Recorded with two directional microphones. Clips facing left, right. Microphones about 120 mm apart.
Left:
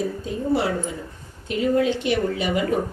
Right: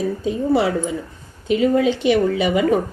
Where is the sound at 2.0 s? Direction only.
90° right.